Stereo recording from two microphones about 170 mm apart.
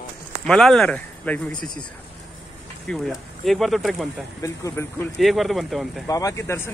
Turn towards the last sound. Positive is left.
turn(degrees=15)  # may be behind; listen again after turning